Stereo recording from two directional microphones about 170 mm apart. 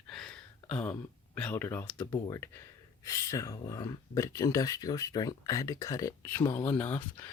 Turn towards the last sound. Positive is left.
turn(degrees=10)  # may be behind; listen again after turning